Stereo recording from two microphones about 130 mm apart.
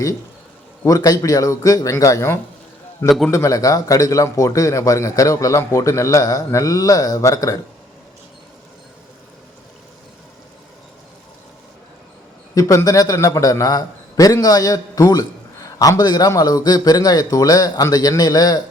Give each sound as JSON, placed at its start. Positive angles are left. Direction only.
{"t": 0.9, "sound": "a man's voice", "side_deg": 25}
{"t": 12.5, "sound": "a man's voice", "side_deg": 25}